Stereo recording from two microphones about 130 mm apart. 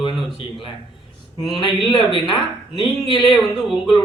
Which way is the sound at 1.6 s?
40° left (ahead or behind).